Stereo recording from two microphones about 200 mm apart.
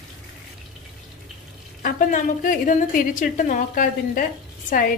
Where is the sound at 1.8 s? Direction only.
45° left (ahead or behind).